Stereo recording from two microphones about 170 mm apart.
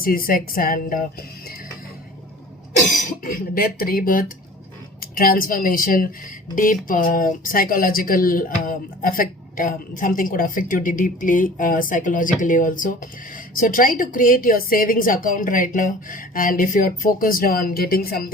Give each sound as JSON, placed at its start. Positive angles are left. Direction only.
{"t": 0.0, "sound": "a woman's voice", "side_deg": 55}
{"t": 2.8, "sound": "a woman's voice", "side_deg": 55}